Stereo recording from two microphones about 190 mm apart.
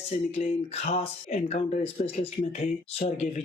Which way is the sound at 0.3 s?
35° left (ahead or behind).